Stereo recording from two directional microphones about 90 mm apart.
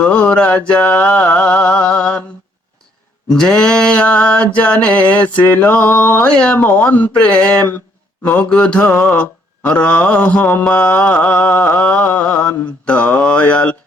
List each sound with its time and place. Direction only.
0.0 s mantra: 15° left (ahead or behind)
3.2 s mantra: 5° left (ahead or behind)